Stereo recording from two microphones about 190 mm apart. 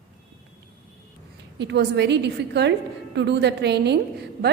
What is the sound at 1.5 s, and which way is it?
A woman's voice, 65° right (ahead or behind).